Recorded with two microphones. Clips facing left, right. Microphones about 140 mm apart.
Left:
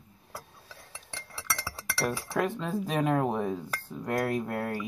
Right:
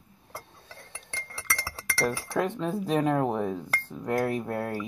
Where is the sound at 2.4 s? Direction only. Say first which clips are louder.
Right 1 dB; 10° left (ahead or behind).